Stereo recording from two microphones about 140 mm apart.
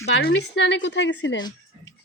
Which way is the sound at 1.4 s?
30° left (ahead or behind).